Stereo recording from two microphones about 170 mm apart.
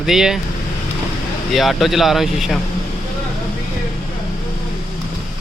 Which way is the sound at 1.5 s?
Centre (ahead or behind).